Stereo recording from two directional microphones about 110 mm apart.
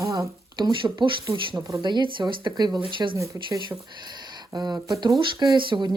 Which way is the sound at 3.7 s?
25° right (ahead or behind).